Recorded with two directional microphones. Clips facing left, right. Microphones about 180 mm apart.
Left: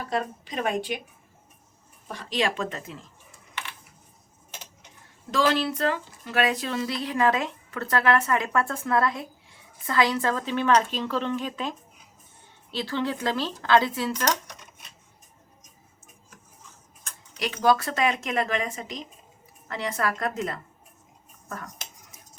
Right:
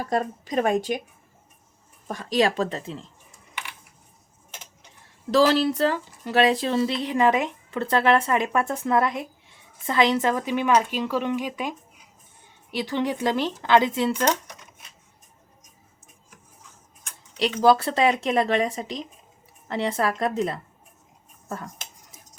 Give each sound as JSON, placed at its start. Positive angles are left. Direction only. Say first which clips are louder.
{"t": 0.1, "sound": "a woman's voice", "louder": "right 5 dB", "side_deg": -45}
{"t": 2.0, "sound": "speech", "louder": "right 5 dB", "side_deg": -40}
{"t": 5.3, "sound": "speech", "louder": "right 5 dB", "side_deg": -35}
{"t": 12.7, "sound": "speech", "louder": "right 3 dB", "side_deg": -15}
{"t": 17.3, "sound": "speech", "louder": "right 4 dB", "side_deg": -30}